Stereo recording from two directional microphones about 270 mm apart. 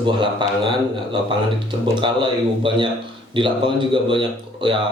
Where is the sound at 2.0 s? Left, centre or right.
Centre.